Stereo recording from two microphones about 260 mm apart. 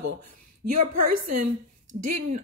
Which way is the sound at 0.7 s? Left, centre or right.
Right.